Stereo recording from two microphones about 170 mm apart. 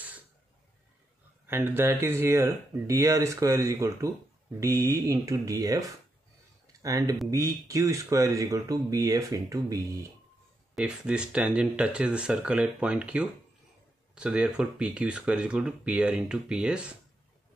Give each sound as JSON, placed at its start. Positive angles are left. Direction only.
{"t": 1.5, "sound": "speech", "side_deg": -10}
{"t": 10.8, "sound": "speech", "side_deg": -5}